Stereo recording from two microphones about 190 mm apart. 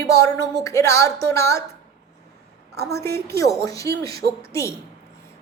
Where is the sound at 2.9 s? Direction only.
15° left (ahead or behind).